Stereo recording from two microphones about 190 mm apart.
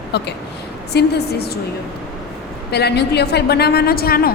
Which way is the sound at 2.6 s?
60° left (ahead or behind).